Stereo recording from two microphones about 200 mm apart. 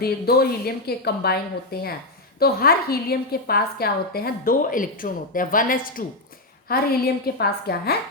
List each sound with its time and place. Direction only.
0.0 s a woman's voice: 50° left (ahead or behind)